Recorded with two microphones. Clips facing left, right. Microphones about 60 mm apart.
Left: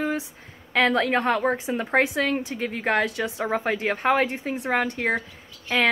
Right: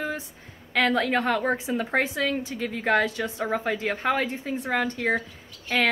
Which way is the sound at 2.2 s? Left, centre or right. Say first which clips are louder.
Left 2 dB; left.